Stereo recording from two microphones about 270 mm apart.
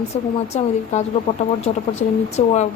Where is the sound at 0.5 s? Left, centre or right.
Left.